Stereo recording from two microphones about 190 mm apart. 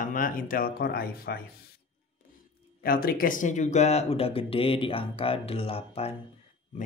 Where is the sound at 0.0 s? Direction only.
45° left (ahead or behind).